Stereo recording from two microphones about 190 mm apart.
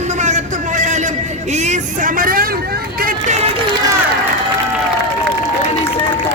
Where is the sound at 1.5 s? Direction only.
40° right (ahead or behind).